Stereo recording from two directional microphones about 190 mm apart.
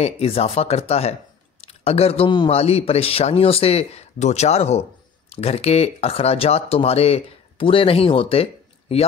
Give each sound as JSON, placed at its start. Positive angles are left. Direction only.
{"t": 0.0, "sound": "speech", "side_deg": 30}